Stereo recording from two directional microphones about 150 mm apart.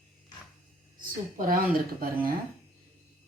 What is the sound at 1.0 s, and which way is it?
A woman's voice, 65° right (ahead or behind).